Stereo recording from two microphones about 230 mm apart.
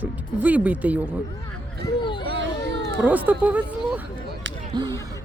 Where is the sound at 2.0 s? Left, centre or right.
Left.